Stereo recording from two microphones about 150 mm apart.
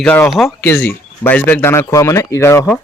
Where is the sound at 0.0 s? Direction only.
10° left (ahead or behind).